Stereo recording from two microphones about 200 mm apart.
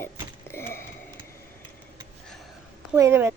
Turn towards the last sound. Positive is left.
turn(degrees=-15)  # may be behind; listen again after turning